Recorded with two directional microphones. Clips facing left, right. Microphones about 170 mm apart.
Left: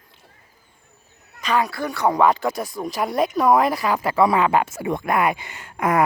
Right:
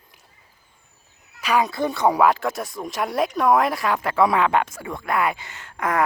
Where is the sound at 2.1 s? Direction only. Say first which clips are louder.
Left 1 dB; 5° right (ahead or behind).